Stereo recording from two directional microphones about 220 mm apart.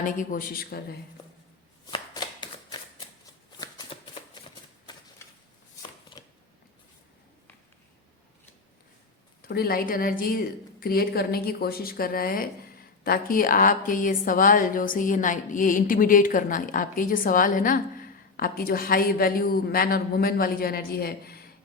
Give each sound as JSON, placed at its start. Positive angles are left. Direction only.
{"t": 0.0, "sound": "a woman's voice", "side_deg": 35}
{"t": 1.9, "sound": "shuffling cards", "side_deg": 20}
{"t": 6.1, "sound": "shuffling cards", "side_deg": 20}
{"t": 9.5, "sound": "a woman's voice", "side_deg": 45}